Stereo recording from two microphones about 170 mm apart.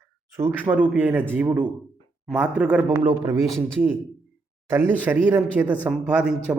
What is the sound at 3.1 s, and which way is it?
Speech, 20° right (ahead or behind).